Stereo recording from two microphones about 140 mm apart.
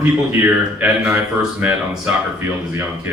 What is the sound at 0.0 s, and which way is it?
Speech, 15° right (ahead or behind).